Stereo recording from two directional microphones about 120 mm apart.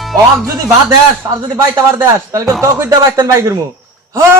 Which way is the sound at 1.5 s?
25° right (ahead or behind).